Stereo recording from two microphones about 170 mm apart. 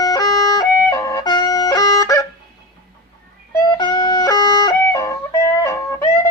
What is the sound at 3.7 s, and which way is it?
Music, 25° left (ahead or behind).